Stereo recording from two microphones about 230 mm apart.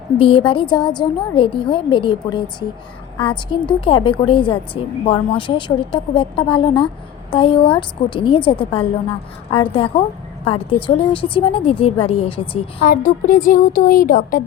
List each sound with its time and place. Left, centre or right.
0.2 s a woman's voice: left
12.8 s speech: left